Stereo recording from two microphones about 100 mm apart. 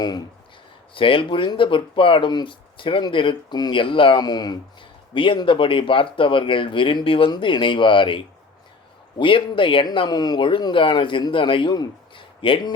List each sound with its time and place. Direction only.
0.9 s speech: 60° left (ahead or behind)
4.2 s speech: 45° left (ahead or behind)
5.1 s speech: 60° left (ahead or behind)
7.3 s speech: 50° left (ahead or behind)
12.4 s speech: 60° left (ahead or behind)